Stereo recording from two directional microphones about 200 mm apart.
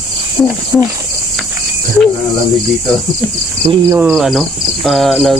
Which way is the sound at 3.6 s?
20° right (ahead or behind).